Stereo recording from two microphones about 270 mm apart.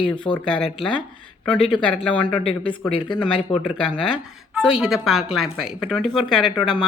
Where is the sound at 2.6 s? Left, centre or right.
Centre.